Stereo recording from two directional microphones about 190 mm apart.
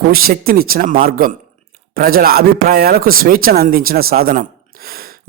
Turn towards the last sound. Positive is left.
turn(degrees=-50)  # may be behind; listen again after turning